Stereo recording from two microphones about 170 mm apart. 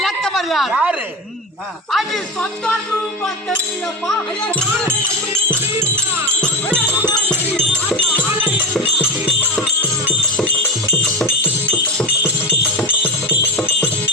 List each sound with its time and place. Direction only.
0.0 s a sound: centre (ahead or behind)
1.9 s music: centre (ahead or behind)
7.1 s music: 5° left (ahead or behind)
8.5 s music: 10° right (ahead or behind)
11.4 s music: 5° left (ahead or behind)